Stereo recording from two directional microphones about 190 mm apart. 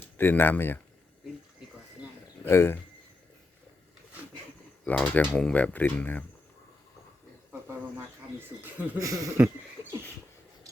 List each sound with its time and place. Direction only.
0.2 s speech: 10° left (ahead or behind)
2.4 s speech: 10° left (ahead or behind)
4.9 s speech: 10° left (ahead or behind)
9.0 s a sound: 15° right (ahead or behind)